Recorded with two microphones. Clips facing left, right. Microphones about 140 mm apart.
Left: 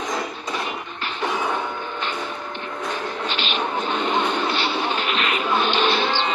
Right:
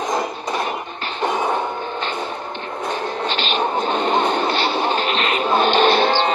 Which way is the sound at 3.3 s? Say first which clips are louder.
Right 5 dB; 35° right (ahead or behind).